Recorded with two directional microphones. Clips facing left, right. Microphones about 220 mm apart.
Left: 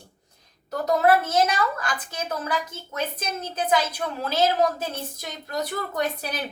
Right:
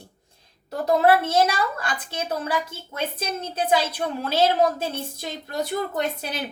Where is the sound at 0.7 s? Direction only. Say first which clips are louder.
Right 1 dB; 30° right (ahead or behind).